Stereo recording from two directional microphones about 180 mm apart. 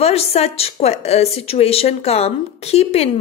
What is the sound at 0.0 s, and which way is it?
A woman's voice, 35° left (ahead or behind).